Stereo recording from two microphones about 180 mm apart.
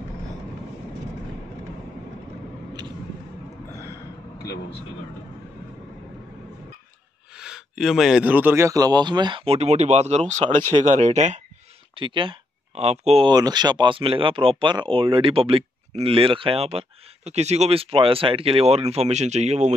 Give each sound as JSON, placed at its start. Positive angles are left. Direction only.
{"t": 7.3, "sound": "a man's voice", "side_deg": -5}
{"t": 11.9, "sound": "speech", "side_deg": -30}
{"t": 13.3, "sound": "speech", "side_deg": -20}